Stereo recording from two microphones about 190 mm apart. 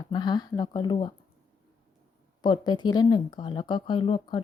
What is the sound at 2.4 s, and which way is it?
A woman's voice, 25° left (ahead or behind).